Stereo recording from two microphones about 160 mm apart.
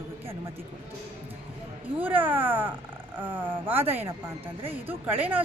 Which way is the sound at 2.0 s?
10° right (ahead or behind).